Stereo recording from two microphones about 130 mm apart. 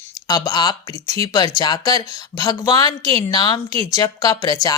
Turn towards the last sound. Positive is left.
turn(degrees=30)  # may be behind; listen again after turning